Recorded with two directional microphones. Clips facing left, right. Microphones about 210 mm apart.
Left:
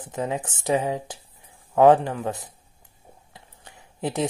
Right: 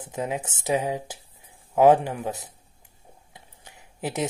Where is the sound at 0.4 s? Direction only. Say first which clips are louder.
Left 1 dB; 20° right (ahead or behind).